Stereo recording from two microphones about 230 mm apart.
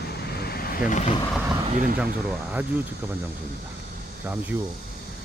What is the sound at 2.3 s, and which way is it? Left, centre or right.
Speech, centre.